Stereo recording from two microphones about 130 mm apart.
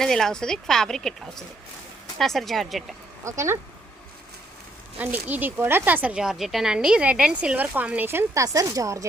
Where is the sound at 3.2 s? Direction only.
20° right (ahead or behind).